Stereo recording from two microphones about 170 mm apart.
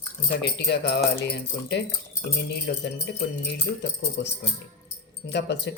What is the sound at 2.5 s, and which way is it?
Speech, 90° left.